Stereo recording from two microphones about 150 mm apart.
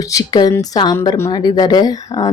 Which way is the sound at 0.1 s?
25° left (ahead or behind).